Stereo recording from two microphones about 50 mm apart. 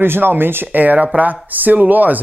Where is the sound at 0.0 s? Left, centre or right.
Right.